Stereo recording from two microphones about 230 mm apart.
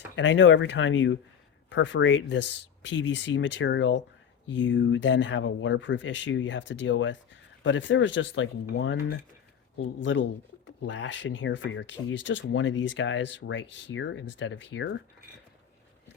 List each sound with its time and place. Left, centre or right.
0.2 s speech: left